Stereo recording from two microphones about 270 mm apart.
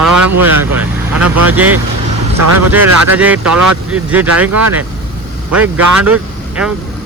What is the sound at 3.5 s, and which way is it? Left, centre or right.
Speech, right.